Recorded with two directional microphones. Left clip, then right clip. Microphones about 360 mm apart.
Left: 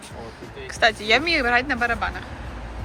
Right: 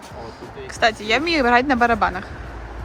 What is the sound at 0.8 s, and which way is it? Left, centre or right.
Speech, centre.